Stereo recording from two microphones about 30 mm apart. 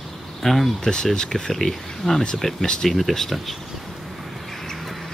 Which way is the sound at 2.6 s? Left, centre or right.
Left.